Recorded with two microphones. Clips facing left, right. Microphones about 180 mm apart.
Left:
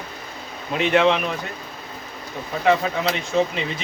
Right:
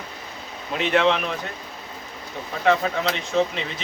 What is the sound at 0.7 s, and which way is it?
Speech, 5° left (ahead or behind).